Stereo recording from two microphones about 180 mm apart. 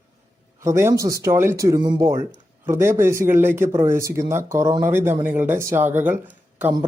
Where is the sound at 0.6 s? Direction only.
15° right (ahead or behind).